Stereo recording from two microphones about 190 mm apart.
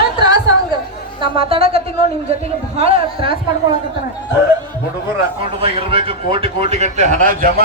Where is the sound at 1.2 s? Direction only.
30° right (ahead or behind).